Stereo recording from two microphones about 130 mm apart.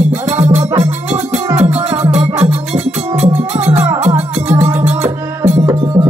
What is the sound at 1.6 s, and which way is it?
Music, 15° right (ahead or behind).